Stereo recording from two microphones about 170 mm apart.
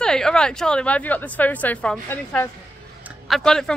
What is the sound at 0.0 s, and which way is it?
A woman's voice, 5° left (ahead or behind).